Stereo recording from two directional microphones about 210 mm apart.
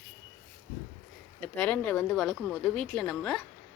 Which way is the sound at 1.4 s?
5° left (ahead or behind).